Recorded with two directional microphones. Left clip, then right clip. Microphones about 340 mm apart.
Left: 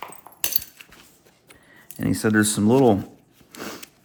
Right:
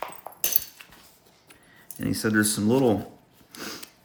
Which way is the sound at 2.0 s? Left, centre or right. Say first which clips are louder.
Left 3 dB; centre.